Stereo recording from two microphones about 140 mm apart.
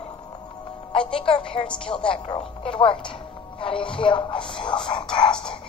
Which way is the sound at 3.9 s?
40° left (ahead or behind).